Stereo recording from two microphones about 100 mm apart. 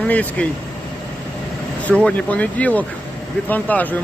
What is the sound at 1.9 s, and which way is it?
Speech, 15° left (ahead or behind).